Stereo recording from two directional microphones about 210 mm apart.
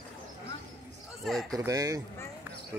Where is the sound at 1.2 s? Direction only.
Centre (ahead or behind).